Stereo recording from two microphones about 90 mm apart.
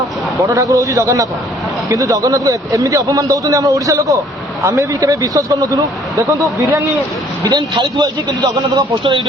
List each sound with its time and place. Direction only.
0.5 s a man's voice: 35° right (ahead or behind)
7.4 s a man's voice: 55° right (ahead or behind)